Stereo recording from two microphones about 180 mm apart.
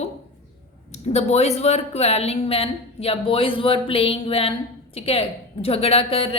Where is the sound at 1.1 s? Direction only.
35° left (ahead or behind).